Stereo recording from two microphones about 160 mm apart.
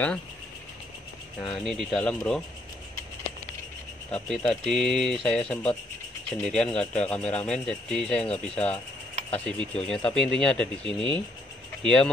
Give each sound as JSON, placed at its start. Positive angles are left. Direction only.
{"t": 1.4, "sound": "speech", "side_deg": 5}
{"t": 4.1, "sound": "speech", "side_deg": 5}